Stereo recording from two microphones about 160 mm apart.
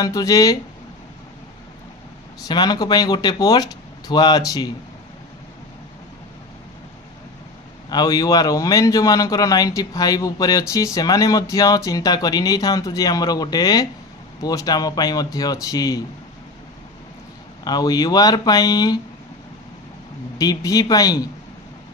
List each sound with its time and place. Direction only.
0.0 s a man's voice: 20° left (ahead or behind)
2.4 s a man's voice: 25° left (ahead or behind)
7.9 s a man's voice: 25° left (ahead or behind)
17.6 s a man's voice: 25° left (ahead or behind)
20.3 s a man's voice: 20° left (ahead or behind)